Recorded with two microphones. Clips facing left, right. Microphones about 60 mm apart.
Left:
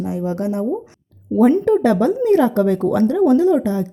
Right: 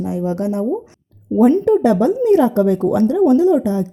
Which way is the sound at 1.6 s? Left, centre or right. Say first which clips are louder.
Right 1 dB; left.